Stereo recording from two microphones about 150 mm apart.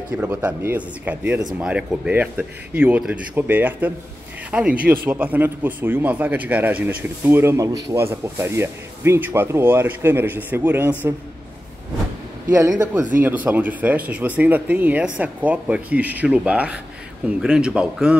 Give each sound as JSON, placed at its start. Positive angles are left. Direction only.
{"t": 0.2, "sound": "a man's voice", "side_deg": -10}
{"t": 12.4, "sound": "a man's voice", "side_deg": -20}
{"t": 13.2, "sound": "a man's voice", "side_deg": -10}